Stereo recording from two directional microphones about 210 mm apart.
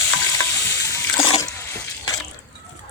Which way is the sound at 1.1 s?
20° left (ahead or behind).